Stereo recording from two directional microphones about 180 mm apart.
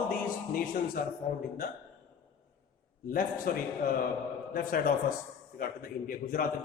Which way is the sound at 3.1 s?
50° left (ahead or behind).